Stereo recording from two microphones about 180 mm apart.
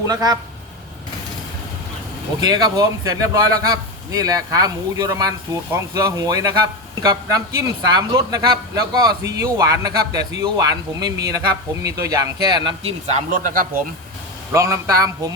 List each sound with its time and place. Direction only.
0.1 s a man's voice: 20° right (ahead or behind)
2.4 s a man's voice: 25° right (ahead or behind)
13.1 s speech: 45° right (ahead or behind)
14.5 s a man's voice: 15° right (ahead or behind)